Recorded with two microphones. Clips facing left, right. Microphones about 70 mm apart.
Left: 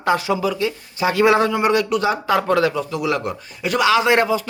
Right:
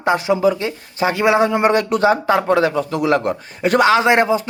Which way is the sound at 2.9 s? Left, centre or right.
Right.